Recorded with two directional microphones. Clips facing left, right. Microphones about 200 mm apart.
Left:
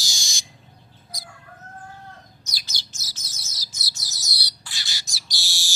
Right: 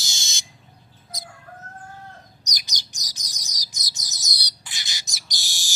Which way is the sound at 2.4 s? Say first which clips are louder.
Right 1 dB; 15° right (ahead or behind).